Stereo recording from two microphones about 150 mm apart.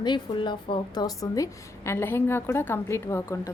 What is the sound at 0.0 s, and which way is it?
A woman's voice, 30° left (ahead or behind).